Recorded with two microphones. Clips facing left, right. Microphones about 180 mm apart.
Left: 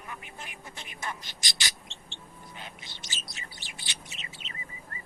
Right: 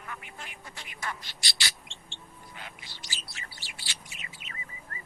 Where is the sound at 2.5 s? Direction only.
20° left (ahead or behind).